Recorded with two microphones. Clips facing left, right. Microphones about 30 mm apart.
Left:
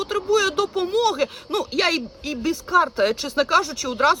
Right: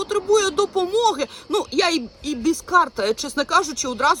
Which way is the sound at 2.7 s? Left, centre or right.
Centre.